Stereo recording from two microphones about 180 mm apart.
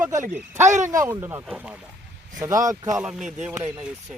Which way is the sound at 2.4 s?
20° right (ahead or behind).